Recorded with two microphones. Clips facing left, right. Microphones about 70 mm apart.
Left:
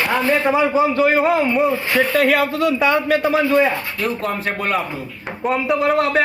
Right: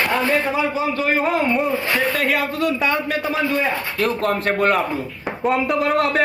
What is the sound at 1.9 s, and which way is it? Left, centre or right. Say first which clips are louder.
Speech: left 6 dB; left.